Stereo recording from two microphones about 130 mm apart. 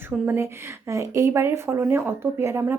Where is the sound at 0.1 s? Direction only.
15° right (ahead or behind).